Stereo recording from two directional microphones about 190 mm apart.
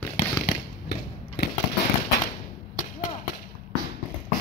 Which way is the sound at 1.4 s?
60° left (ahead or behind).